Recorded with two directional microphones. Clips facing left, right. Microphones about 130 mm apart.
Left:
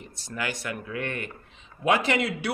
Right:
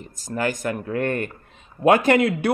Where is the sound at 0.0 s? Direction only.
40° right (ahead or behind).